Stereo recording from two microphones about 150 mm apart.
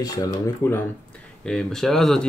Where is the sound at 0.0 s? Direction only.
20° left (ahead or behind).